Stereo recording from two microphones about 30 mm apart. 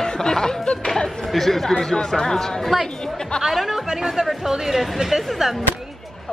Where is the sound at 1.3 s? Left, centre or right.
Centre.